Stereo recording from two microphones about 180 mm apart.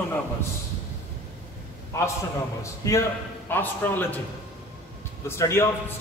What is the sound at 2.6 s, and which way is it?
A man's voice, 15° left (ahead or behind).